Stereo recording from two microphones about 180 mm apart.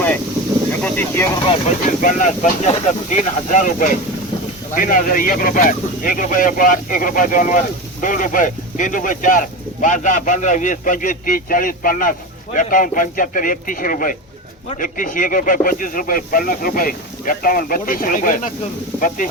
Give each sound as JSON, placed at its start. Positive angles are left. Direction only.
{"t": 0.8, "sound": "speech", "side_deg": 10}
{"t": 1.8, "sound": "speech", "side_deg": 45}